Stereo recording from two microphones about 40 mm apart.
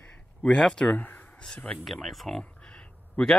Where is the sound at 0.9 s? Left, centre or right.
Left.